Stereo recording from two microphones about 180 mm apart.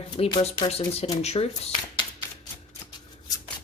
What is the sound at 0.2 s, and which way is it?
A woman's voice, 30° left (ahead or behind).